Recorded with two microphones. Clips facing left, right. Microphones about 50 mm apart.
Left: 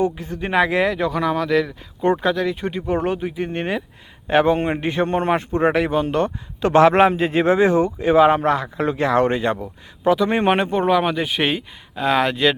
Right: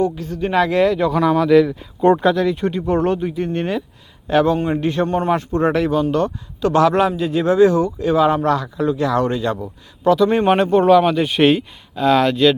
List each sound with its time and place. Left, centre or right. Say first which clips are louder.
0.0 s speech: right 2 dB; left
1.0 s speech: right 5 dB; centre; by 4.8 s left
4.8 s speech: right 2 dB; centre
5.0 s speech: right 1 dB; left
8.8 s speech: left 2 dB; left
10.0 s speech: right 3 dB; centre
11.9 s speech: right 4 dB; centre